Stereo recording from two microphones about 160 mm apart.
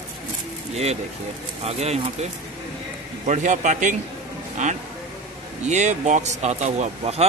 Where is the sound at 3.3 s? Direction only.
50° right (ahead or behind).